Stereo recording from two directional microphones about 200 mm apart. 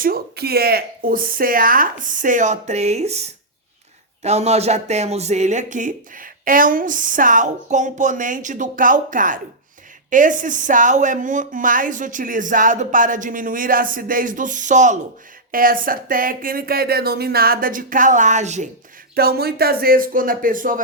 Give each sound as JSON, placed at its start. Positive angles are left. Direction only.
{"t": 0.0, "sound": "speech", "side_deg": -50}
{"t": 19.1, "sound": "speech", "side_deg": -50}